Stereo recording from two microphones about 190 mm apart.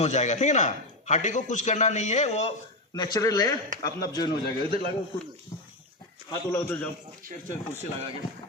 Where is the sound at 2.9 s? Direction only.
20° left (ahead or behind).